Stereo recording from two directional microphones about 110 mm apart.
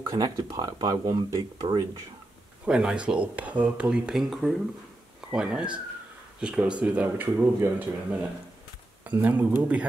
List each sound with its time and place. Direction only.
0.1 s speech: 35° right (ahead or behind)
2.6 s speech: 5° right (ahead or behind)